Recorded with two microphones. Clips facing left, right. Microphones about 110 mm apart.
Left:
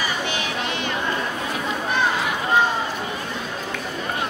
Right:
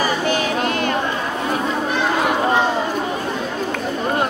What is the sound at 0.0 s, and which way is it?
Child singing, 45° right (ahead or behind).